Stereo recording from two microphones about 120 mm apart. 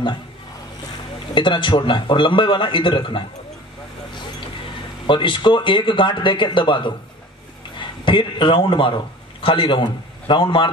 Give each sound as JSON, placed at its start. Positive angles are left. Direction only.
{"t": 1.3, "sound": "speech", "side_deg": 40}
{"t": 5.0, "sound": "a man's voice", "side_deg": 45}